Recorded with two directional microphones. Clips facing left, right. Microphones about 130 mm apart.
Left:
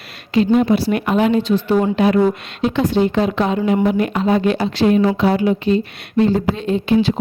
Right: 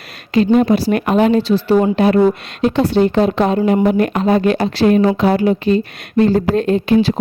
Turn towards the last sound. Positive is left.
turn(degrees=-50)  # may be behind; listen again after turning